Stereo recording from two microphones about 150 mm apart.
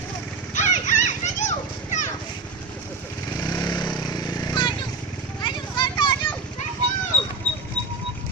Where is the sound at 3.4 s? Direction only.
30° left (ahead or behind).